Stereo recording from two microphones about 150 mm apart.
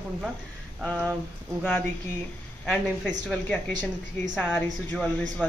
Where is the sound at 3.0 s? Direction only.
5° left (ahead or behind).